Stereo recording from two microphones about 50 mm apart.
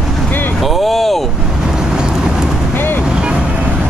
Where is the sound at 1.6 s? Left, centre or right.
Centre.